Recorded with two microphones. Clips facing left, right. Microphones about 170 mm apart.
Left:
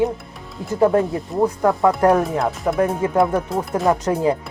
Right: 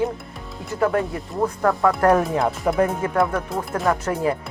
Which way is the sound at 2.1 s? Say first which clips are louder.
Left 1 dB; centre (ahead or behind).